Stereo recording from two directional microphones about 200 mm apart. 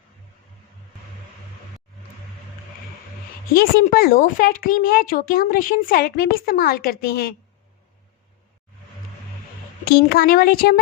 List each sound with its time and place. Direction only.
3.5 s a woman's voice: 50° left (ahead or behind)
9.8 s a woman's voice: 50° left (ahead or behind)